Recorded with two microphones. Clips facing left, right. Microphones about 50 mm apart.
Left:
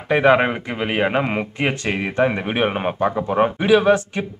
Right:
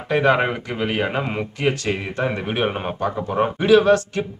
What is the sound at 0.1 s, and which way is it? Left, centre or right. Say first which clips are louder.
A man's voice: left 3 dB; centre.